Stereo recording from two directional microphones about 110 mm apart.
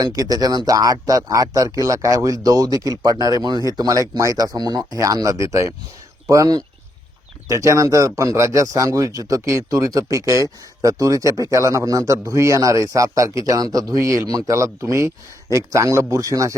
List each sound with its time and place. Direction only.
0.0 s speech: 35° right (ahead or behind)